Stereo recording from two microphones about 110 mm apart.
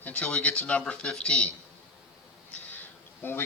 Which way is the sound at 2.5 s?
15° left (ahead or behind).